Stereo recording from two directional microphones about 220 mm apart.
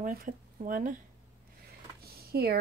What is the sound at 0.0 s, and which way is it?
Speech, 40° right (ahead or behind).